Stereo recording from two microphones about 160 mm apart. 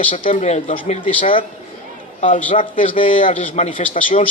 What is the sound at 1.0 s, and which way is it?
Speech, 35° left (ahead or behind).